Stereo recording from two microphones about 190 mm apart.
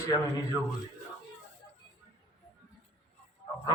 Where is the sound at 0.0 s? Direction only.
15° left (ahead or behind).